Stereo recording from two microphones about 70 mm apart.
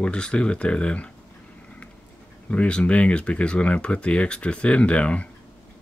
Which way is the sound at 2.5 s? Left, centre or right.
Centre.